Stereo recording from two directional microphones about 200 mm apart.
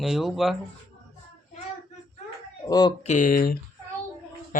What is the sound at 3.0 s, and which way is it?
Speech, 35° left (ahead or behind).